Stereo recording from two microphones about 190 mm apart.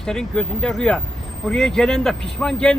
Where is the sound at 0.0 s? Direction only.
5° left (ahead or behind).